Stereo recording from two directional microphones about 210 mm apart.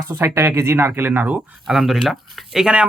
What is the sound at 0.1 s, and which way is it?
Speech, 10° right (ahead or behind).